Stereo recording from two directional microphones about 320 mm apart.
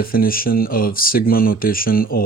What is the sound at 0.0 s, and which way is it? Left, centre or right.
Speech, left.